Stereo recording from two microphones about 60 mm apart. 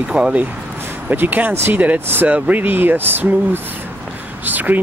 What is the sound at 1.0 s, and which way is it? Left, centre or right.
Speech, right.